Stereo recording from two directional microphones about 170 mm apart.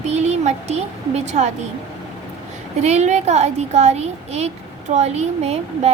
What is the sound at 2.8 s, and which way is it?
Speech, 40° right (ahead or behind).